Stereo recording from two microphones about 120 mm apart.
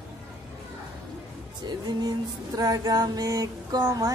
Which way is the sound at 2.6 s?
30° right (ahead or behind).